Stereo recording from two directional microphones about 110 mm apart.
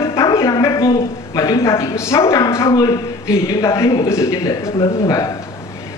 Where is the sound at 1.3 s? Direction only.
30° left (ahead or behind).